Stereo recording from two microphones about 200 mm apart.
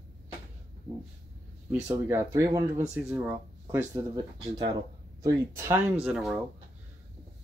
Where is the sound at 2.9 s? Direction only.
5° right (ahead or behind).